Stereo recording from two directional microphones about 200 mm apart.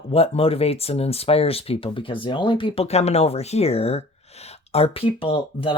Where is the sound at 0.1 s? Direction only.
30° left (ahead or behind).